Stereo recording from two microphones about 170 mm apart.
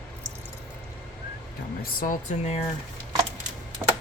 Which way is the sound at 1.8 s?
55° left (ahead or behind).